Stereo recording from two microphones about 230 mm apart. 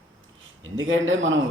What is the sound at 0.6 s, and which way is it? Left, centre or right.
Speech, right.